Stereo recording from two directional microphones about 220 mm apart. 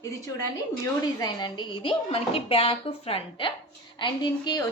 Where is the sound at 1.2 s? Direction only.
20° left (ahead or behind).